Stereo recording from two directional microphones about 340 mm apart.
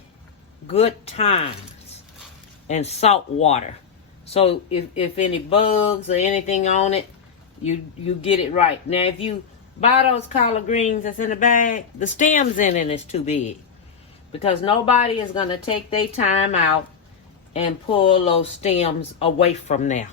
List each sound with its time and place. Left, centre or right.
0.7 s speech: centre